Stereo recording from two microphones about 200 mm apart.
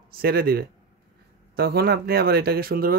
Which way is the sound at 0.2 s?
50° right (ahead or behind).